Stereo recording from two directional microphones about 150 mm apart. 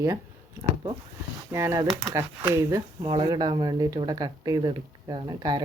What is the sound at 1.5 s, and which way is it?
Speech, 20° right (ahead or behind).